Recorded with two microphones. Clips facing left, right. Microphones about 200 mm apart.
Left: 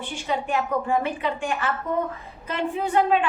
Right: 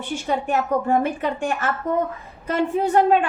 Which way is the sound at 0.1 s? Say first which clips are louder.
Right 4 dB; 45° right (ahead or behind).